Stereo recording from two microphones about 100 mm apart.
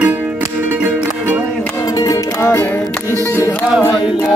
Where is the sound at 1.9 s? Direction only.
35° left (ahead or behind).